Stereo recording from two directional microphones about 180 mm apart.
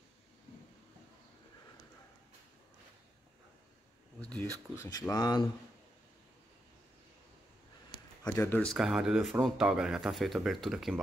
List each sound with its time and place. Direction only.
4.8 s speech: 20° left (ahead or behind)
8.2 s speech: 15° left (ahead or behind)
8.7 s speech: 5° right (ahead or behind)